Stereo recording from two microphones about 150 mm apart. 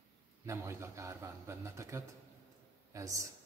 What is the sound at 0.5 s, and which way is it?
A man's voice, 20° right (ahead or behind).